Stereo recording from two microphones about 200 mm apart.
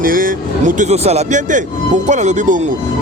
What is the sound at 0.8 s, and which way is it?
Speech, 35° right (ahead or behind).